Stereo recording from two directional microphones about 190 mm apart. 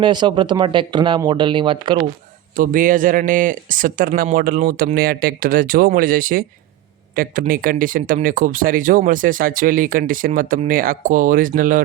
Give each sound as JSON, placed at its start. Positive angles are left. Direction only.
{"t": 0.0, "sound": "speech", "side_deg": -25}
{"t": 2.6, "sound": "speech", "side_deg": -45}